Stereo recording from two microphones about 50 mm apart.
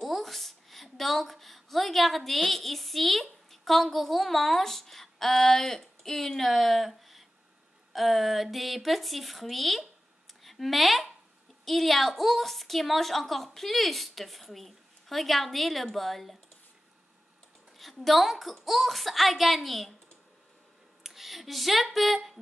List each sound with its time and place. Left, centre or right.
0.0 s a woman's voice: centre
17.7 s a woman's voice: centre
21.0 s speech: centre